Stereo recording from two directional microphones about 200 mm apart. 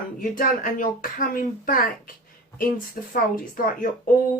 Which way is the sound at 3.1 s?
45° left (ahead or behind).